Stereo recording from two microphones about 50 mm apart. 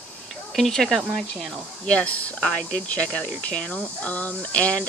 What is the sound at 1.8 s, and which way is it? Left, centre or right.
Speech, left.